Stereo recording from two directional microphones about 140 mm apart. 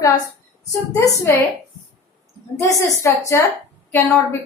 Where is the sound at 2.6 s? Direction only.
20° left (ahead or behind).